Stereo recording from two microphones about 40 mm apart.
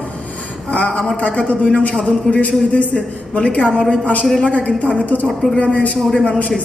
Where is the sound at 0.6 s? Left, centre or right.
Left.